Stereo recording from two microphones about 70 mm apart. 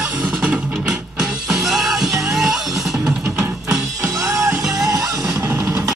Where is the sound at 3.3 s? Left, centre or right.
Right.